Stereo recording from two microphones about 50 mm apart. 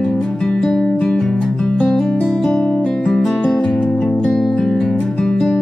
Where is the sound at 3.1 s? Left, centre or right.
Centre.